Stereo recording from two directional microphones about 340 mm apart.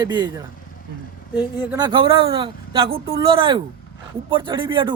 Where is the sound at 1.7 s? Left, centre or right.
Centre.